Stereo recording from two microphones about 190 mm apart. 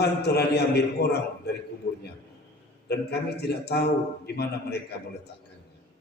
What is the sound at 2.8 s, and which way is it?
A man's voice, 60° left (ahead or behind).